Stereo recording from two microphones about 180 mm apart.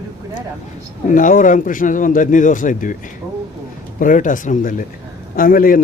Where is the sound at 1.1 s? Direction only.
45° left (ahead or behind).